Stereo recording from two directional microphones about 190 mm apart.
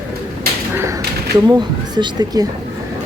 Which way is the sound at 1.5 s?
20° right (ahead or behind).